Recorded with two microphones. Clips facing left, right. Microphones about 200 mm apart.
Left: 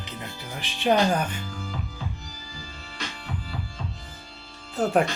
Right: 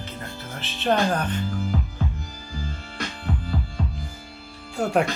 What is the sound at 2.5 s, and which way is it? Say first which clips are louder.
Music: right 8 dB; 55° right (ahead or behind).